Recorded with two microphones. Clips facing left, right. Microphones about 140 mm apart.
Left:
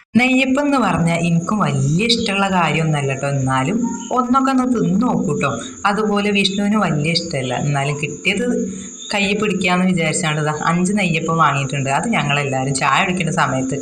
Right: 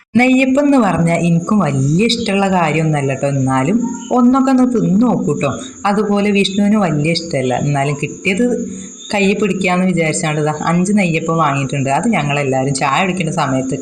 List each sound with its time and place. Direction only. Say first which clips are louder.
0.2 s speech: right 4 dB; 45° right (ahead or behind)
9.1 s speech: right 5 dB; 35° right (ahead or behind)